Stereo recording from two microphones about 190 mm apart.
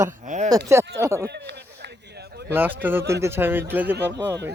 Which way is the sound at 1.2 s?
65° right (ahead or behind).